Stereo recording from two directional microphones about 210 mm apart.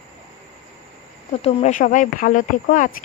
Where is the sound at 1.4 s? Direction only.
35° left (ahead or behind).